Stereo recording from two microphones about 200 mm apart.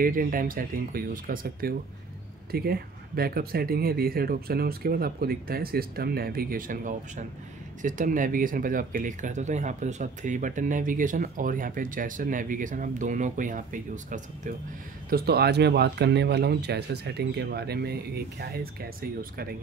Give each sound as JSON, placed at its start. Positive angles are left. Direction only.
{"t": 0.0, "sound": "speech", "side_deg": -45}
{"t": 15.0, "sound": "speech", "side_deg": -50}